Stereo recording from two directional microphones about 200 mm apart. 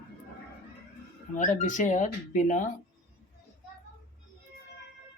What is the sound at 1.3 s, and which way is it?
Speech, 35° left (ahead or behind).